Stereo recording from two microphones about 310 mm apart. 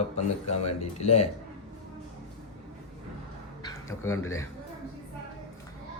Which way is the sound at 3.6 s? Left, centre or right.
Centre.